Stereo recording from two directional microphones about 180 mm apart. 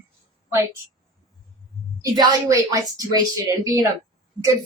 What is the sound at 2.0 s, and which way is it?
A woman's voice, 20° right (ahead or behind).